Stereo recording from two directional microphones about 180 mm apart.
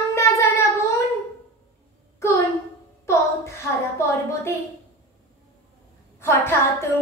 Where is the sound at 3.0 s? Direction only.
15° left (ahead or behind).